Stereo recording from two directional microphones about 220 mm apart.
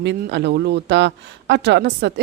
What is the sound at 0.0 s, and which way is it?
Speech, 50° right (ahead or behind).